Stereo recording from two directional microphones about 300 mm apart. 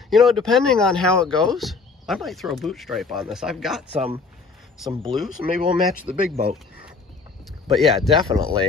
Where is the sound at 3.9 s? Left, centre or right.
Centre.